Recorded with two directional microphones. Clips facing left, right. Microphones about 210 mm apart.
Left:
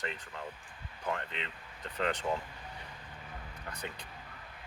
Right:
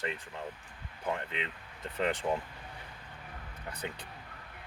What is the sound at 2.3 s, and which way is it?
Speech, 15° right (ahead or behind).